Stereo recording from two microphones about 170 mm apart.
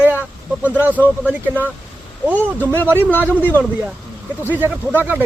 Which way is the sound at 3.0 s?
10° left (ahead or behind).